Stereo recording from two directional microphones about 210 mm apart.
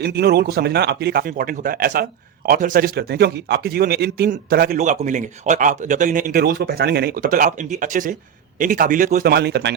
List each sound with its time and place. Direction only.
0.0 s a man's voice: 50° right (ahead or behind)